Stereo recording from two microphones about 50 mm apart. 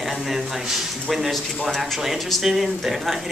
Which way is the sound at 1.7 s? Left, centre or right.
Centre.